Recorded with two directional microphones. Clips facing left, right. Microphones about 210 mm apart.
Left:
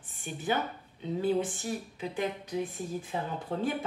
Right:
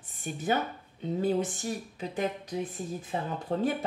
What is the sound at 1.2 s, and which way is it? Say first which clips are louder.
Speech: even; 40° right (ahead or behind).